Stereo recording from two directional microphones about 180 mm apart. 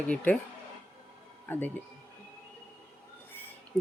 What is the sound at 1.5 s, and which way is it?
Speech, 10° left (ahead or behind).